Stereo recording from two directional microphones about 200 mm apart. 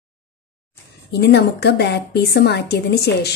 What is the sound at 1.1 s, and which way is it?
A woman's voice, 55° left (ahead or behind).